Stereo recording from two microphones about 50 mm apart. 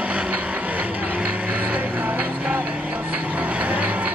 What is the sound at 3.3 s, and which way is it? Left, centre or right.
Vehicle, right.